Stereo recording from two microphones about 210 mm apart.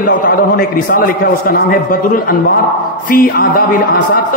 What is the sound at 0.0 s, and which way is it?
A man's voice, 45° left (ahead or behind).